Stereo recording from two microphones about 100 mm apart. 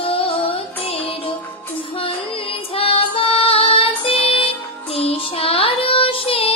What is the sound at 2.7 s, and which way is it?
Music, 70° left (ahead or behind).